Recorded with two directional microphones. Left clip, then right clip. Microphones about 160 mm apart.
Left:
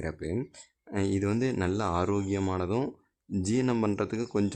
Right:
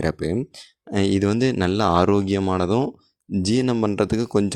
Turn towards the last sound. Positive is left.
turn(degrees=-35)  # may be behind; listen again after turning